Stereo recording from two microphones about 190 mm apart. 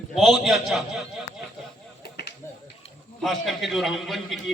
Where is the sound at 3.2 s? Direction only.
Centre (ahead or behind).